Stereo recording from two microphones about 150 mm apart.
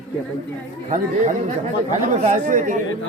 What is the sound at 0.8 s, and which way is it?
Speech, 55° right (ahead or behind).